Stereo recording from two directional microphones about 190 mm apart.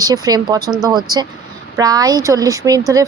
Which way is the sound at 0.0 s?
20° right (ahead or behind).